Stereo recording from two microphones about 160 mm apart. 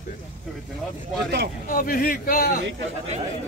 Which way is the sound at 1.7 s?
60° left (ahead or behind).